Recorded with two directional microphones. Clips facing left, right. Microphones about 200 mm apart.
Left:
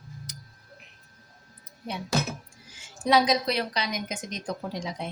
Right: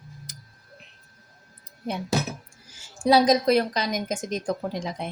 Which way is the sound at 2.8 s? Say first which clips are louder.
Right 4 dB; 35° right (ahead or behind).